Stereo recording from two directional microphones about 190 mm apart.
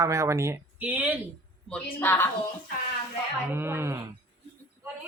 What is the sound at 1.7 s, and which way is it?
Speech, 10° left (ahead or behind).